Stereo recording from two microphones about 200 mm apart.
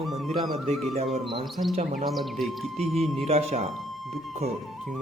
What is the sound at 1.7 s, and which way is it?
Speech, 40° right (ahead or behind).